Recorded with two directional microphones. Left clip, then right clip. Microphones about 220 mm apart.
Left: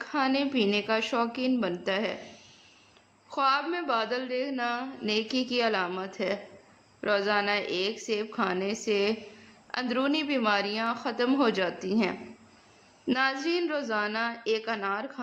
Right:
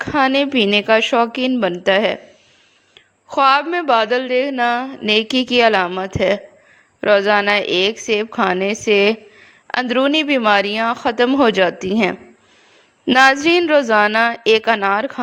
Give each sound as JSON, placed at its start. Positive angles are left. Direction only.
{"t": 0.0, "sound": "a woman's voice", "side_deg": -35}
{"t": 3.2, "sound": "a woman's voice", "side_deg": -35}